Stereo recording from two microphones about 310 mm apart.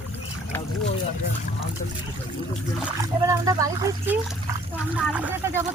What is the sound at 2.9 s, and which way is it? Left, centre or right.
Speech, centre.